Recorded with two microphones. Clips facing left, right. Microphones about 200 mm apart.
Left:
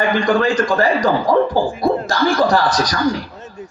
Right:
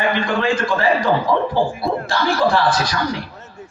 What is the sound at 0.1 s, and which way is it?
A man's voice, 40° left (ahead or behind).